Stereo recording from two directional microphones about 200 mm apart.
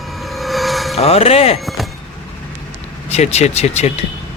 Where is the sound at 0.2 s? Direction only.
Centre (ahead or behind).